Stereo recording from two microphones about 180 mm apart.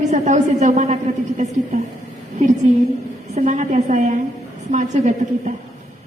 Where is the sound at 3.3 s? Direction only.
40° right (ahead or behind).